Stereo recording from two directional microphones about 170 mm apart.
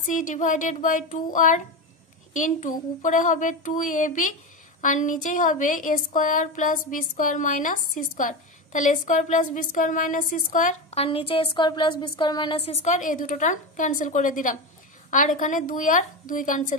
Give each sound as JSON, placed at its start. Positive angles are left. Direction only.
{"t": 0.0, "sound": "speech", "side_deg": 50}